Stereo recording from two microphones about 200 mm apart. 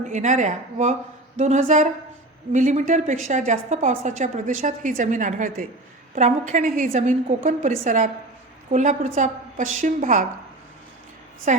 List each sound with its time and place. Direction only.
0.1 s a woman's voice: 35° right (ahead or behind)
11.5 s a woman's voice: 35° right (ahead or behind)